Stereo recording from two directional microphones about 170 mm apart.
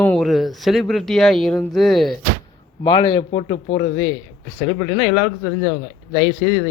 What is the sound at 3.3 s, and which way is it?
Speech, 40° left (ahead or behind).